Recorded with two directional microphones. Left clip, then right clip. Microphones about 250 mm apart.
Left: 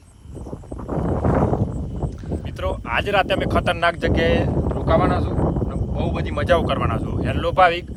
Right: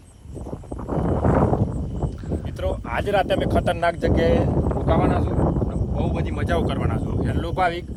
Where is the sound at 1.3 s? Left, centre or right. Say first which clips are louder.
Even; centre.